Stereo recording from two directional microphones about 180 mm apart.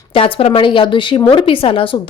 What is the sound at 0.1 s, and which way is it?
A woman's voice, 30° left (ahead or behind).